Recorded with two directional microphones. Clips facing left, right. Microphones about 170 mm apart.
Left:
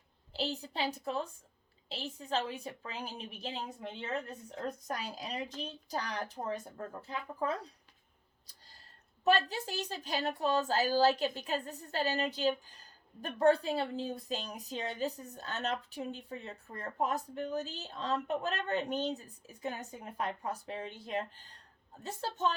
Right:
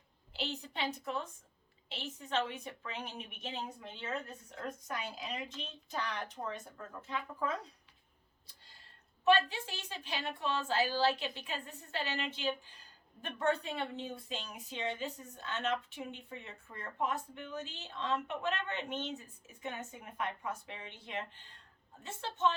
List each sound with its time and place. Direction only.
0.3 s a woman's voice: 35° left (ahead or behind)